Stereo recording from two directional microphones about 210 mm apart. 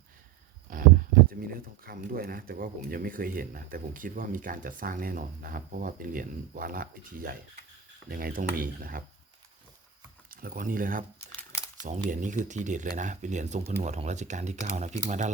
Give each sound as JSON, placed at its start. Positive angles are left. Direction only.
{"t": 0.7, "sound": "speech", "side_deg": -40}
{"t": 10.3, "sound": "speech", "side_deg": -40}
{"t": 12.0, "sound": "speech", "side_deg": -35}